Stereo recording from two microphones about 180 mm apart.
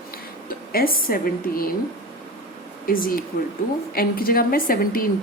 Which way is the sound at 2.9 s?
50° left (ahead or behind).